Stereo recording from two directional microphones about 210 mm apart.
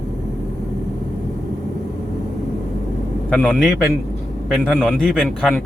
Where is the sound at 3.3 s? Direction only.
5° left (ahead or behind).